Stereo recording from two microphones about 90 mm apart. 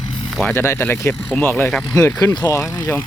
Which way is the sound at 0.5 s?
30° left (ahead or behind).